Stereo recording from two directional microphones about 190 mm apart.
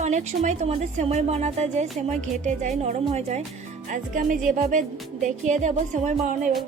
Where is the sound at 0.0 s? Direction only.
40° right (ahead or behind).